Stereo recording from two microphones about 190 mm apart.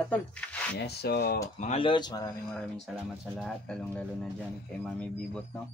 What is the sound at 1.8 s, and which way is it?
Speech, 25° left (ahead or behind).